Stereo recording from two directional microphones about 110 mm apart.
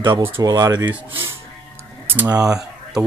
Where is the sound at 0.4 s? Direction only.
35° right (ahead or behind).